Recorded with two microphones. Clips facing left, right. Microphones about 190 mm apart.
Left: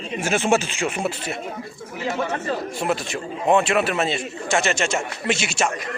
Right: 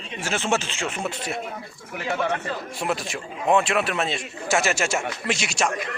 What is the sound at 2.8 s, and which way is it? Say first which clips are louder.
A man's voice: left 1 dB; centre (ahead or behind).